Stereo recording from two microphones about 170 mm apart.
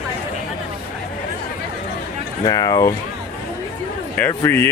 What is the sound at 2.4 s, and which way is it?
Speech, 25° left (ahead or behind).